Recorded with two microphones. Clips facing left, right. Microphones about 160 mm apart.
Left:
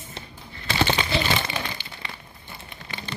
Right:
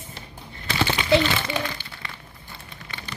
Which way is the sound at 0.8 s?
25° left (ahead or behind).